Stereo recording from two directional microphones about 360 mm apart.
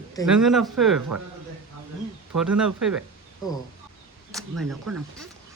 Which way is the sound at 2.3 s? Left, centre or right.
Centre.